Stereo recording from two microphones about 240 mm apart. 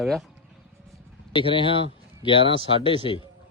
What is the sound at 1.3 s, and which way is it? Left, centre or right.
Speech, left.